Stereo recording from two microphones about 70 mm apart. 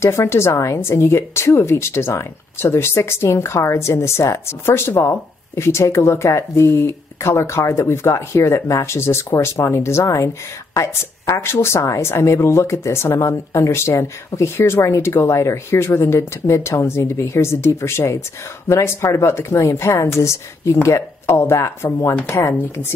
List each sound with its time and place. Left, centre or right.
0.0 s speech: left